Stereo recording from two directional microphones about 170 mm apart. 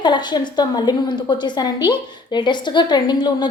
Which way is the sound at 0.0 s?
25° left (ahead or behind).